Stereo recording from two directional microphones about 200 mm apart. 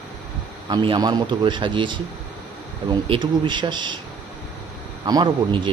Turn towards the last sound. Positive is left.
turn(degrees=-20)  # may be behind; listen again after turning